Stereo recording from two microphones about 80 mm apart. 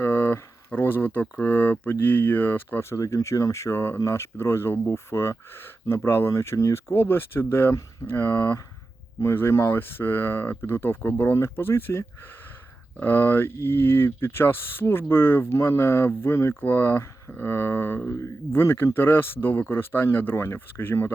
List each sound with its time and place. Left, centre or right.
0.0 s speech: left
2.9 s speech: left